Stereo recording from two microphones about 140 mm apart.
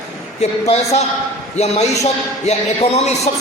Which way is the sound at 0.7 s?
50° left (ahead or behind).